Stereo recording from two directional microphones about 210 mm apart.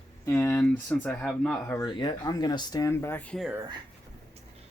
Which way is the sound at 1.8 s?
20° left (ahead or behind).